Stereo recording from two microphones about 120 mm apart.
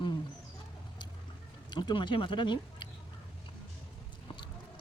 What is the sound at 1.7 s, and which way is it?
Speech, 40° left (ahead or behind).